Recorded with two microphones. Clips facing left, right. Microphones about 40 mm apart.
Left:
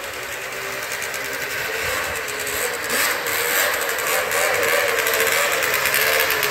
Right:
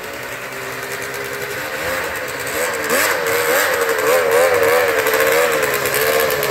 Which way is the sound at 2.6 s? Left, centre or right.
Right.